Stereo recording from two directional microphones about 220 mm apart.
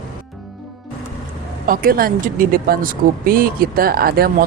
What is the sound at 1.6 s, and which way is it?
Speech, 40° right (ahead or behind).